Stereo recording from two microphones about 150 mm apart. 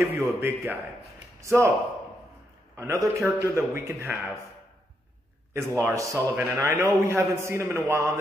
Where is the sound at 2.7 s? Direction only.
20° right (ahead or behind).